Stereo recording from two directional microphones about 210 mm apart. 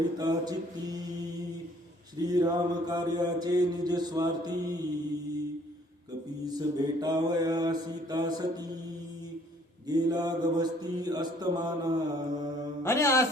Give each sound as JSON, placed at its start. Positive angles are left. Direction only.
{"t": 0.2, "sound": "mantra", "side_deg": -20}
{"t": 2.3, "sound": "mantra", "side_deg": -20}
{"t": 6.4, "sound": "mantra", "side_deg": -20}
{"t": 9.8, "sound": "mantra", "side_deg": -20}
{"t": 12.8, "sound": "mantra", "side_deg": 15}